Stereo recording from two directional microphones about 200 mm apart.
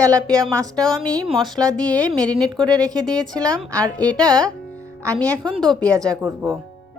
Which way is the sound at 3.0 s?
5° left (ahead or behind).